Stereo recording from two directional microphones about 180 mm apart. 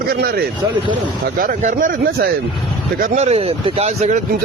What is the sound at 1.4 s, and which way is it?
Speech, 50° right (ahead or behind).